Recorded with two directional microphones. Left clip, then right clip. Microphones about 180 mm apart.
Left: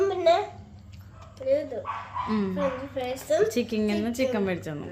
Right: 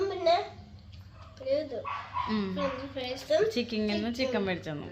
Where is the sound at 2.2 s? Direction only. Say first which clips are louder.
Left 7 dB; 10° left (ahead or behind).